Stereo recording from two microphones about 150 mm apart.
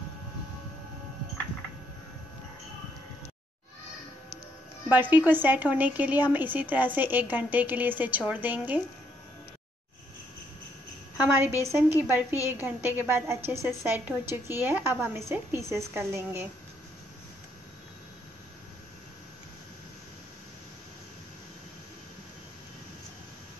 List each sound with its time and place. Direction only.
4.8 s a woman's voice: 10° right (ahead or behind)
11.2 s a woman's voice: 15° right (ahead or behind)